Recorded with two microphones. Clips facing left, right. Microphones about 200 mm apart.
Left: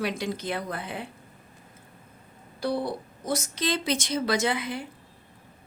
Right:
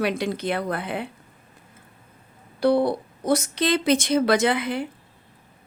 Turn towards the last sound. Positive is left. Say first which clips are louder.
# right 5 dB
turn(degrees=-65)  # may be behind; listen again after turning